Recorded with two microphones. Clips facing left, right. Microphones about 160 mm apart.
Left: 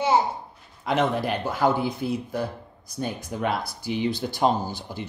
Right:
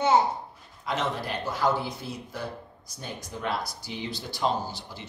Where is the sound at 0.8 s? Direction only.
60° left (ahead or behind).